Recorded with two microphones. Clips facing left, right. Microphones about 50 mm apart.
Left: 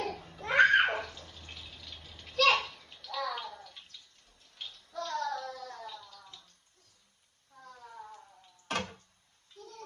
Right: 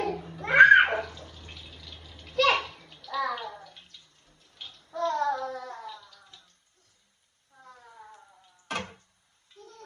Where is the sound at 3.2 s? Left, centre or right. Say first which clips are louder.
Right 5 dB; right.